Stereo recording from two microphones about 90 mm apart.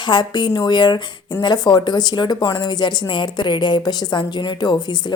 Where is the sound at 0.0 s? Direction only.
55° left (ahead or behind).